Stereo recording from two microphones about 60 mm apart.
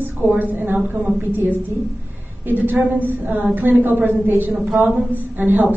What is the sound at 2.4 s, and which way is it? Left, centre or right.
Speech, right.